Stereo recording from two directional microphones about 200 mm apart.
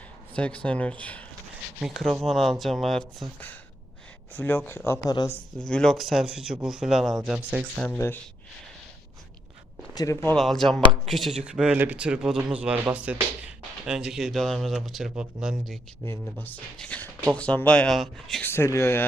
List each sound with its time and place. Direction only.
0.3 s speech: 5° left (ahead or behind)
5.5 s speech: 5° left (ahead or behind)
7.9 s speech: 10° left (ahead or behind)
9.9 s speech: 15° left (ahead or behind)
10.3 s speech: centre (ahead or behind)
16.0 s speech: 10° left (ahead or behind)